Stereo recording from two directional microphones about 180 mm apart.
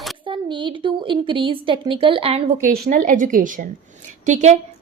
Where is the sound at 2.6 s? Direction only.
50° right (ahead or behind).